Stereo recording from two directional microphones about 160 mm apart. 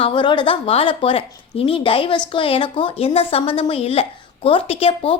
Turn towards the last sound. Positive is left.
turn(degrees=40)  # may be behind; listen again after turning